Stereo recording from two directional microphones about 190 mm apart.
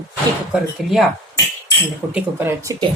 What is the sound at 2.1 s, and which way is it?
Speech, 10° right (ahead or behind).